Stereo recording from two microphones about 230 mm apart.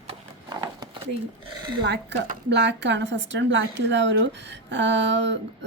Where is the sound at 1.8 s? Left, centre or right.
Right.